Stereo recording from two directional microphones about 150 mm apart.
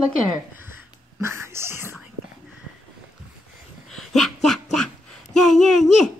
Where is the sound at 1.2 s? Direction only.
15° right (ahead or behind).